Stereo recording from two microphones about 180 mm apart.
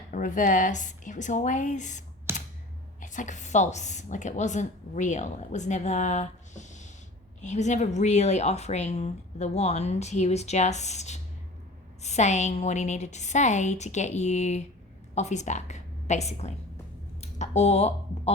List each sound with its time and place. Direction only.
0.1 s a woman's voice: 45° left (ahead or behind)
2.3 s a sound: 15° right (ahead or behind)
3.0 s a woman's voice: 45° left (ahead or behind)